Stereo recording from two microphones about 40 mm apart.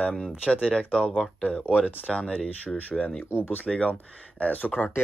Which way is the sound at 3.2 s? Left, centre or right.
Left.